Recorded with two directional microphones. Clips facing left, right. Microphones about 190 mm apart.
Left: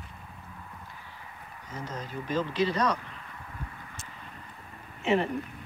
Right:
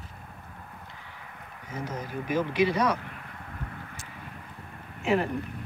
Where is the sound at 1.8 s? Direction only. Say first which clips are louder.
Right 3 dB; 10° right (ahead or behind).